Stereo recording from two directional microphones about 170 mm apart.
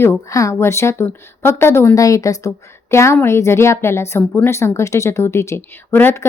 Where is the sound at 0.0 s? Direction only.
15° left (ahead or behind).